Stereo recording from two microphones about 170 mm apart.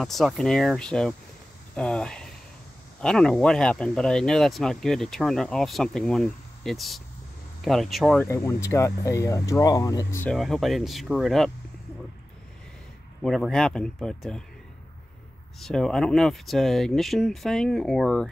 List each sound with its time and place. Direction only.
0.0 s speech: centre (ahead or behind)
8.2 s speech: 15° left (ahead or behind)
10.3 s speech: centre (ahead or behind)
13.2 s speech: 5° left (ahead or behind)
15.6 s speech: 5° left (ahead or behind)